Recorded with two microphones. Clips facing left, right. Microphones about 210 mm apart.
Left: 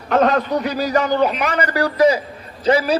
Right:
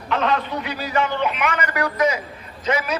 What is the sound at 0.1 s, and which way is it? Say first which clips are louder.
A man's voice: left 6 dB; 45° left (ahead or behind).